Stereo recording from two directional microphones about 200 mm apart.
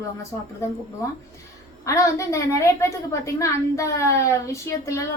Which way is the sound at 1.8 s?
15° left (ahead or behind).